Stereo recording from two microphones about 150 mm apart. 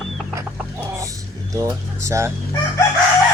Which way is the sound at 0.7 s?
20° right (ahead or behind).